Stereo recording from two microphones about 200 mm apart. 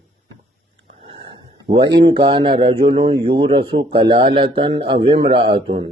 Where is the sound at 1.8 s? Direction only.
55° right (ahead or behind).